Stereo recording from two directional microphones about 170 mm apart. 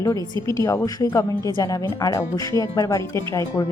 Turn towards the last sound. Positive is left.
turn(degrees=20)  # may be behind; listen again after turning